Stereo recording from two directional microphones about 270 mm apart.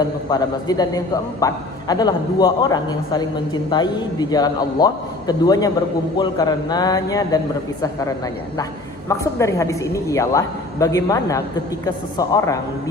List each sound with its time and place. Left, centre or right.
0.0 s a man's voice: centre
9.0 s a man's voice: centre